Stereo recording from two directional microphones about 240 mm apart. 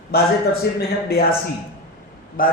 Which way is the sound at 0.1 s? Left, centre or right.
Left.